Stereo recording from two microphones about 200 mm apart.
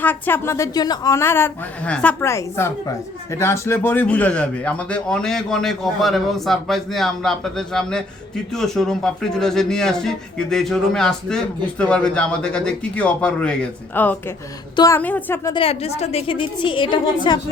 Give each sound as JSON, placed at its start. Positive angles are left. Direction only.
{"t": 0.0, "sound": "a woman's voice", "side_deg": 10}
{"t": 15.4, "sound": "a woman's voice", "side_deg": 25}